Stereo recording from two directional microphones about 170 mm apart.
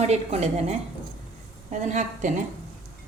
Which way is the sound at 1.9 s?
45° right (ahead or behind).